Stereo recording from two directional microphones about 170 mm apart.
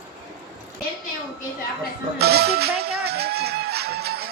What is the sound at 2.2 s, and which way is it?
Music, 70° right (ahead or behind).